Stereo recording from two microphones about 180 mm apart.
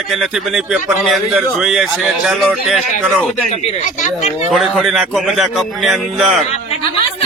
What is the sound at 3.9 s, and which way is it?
Speech, 40° left (ahead or behind).